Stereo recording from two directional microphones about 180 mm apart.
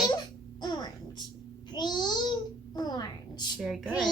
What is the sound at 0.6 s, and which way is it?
A child's voice, 25° left (ahead or behind).